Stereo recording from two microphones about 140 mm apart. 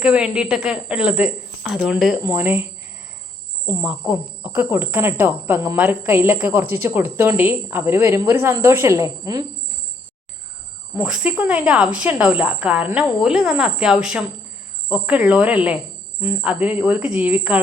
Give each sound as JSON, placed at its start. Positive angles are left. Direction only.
{"t": 0.0, "sound": "speech", "side_deg": -5}
{"t": 2.2, "sound": "speech", "side_deg": -15}
{"t": 3.7, "sound": "speech", "side_deg": -10}
{"t": 10.9, "sound": "speech", "side_deg": -5}